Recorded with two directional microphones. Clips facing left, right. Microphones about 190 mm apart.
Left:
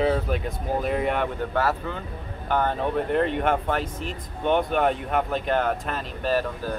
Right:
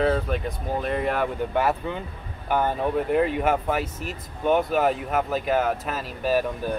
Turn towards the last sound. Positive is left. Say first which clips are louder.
# right 2 dB
turn(degrees=-15)  # may be behind; listen again after turning